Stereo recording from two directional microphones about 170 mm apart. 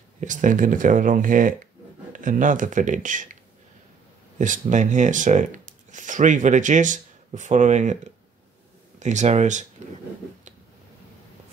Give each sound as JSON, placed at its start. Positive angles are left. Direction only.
{"t": 0.2, "sound": "speech", "side_deg": -50}
{"t": 4.4, "sound": "speech", "side_deg": -50}